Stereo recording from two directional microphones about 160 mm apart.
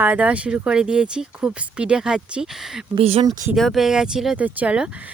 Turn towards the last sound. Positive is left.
turn(degrees=-10)  # may be behind; listen again after turning